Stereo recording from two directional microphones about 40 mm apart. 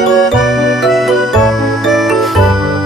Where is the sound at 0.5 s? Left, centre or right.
Centre.